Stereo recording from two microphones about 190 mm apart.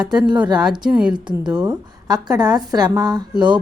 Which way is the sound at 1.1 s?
25° right (ahead or behind).